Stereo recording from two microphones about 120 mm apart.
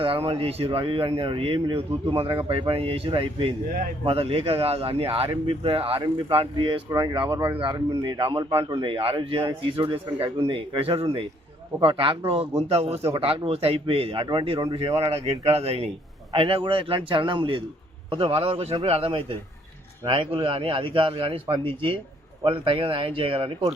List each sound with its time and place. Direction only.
0.0 s a man's voice: 50° right (ahead or behind)
6.9 s a man's voice: 35° right (ahead or behind); by 13.1 s 60° right (ahead or behind)
13.1 s a man's voice: 50° right (ahead or behind)